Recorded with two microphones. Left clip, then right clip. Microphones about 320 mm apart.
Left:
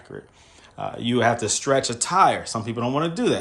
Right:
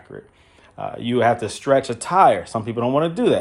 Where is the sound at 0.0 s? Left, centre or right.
Centre.